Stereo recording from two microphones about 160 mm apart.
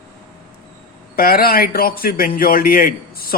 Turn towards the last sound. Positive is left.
turn(degrees=70)  # may be behind; listen again after turning